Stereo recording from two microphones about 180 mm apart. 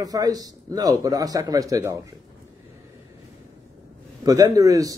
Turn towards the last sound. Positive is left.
turn(degrees=-20)  # may be behind; listen again after turning